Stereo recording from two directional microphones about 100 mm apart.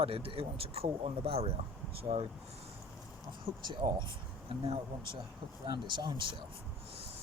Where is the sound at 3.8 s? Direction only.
50° right (ahead or behind).